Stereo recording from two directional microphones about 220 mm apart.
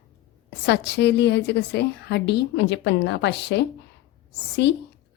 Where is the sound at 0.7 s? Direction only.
50° left (ahead or behind).